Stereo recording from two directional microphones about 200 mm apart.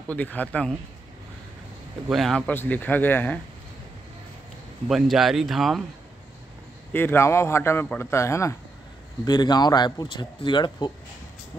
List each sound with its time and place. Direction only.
0.1 s a man's voice: 10° left (ahead or behind)
2.0 s a man's voice: centre (ahead or behind)
4.8 s speech: centre (ahead or behind)
6.9 s a man's voice: 10° left (ahead or behind)